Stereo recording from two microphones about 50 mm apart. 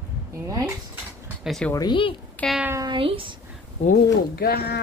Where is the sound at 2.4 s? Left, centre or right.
Left.